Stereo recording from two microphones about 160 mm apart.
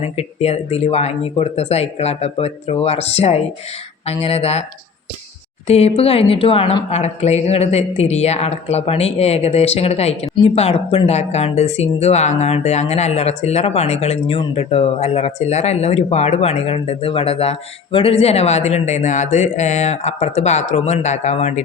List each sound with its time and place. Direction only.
0.0 s speech: 40° left (ahead or behind)
5.6 s speech: 40° left (ahead or behind)